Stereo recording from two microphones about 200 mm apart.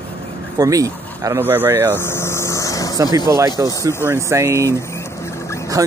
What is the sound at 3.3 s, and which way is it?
Speech, 15° right (ahead or behind).